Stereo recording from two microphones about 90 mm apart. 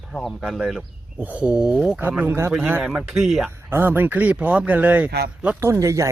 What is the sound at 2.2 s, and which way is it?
Speech, 30° right (ahead or behind).